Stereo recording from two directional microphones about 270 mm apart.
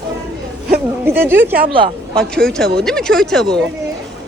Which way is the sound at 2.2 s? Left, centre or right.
Centre.